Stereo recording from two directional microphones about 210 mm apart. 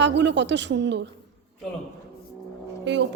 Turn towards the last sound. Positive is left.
turn(degrees=-60)  # may be behind; listen again after turning